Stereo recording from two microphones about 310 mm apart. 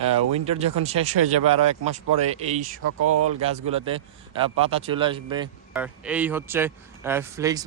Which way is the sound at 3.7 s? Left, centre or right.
Centre.